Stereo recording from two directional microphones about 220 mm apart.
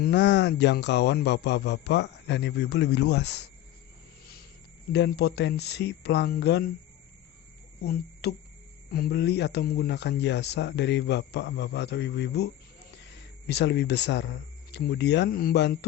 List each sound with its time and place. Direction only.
0.0 s speech: 50° left (ahead or behind)
4.9 s speech: 50° left (ahead or behind)
8.2 s speech: 45° left (ahead or behind)
13.5 s speech: 50° left (ahead or behind)